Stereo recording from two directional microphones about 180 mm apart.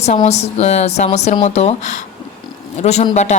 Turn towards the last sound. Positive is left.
turn(degrees=35)  # may be behind; listen again after turning